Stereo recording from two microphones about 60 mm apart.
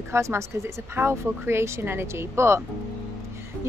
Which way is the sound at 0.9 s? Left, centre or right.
Right.